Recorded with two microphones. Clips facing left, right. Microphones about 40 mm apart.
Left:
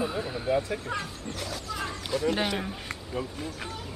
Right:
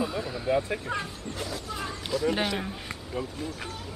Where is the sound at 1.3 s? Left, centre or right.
Left.